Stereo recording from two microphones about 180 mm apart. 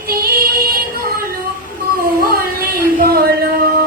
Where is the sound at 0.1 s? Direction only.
55° right (ahead or behind).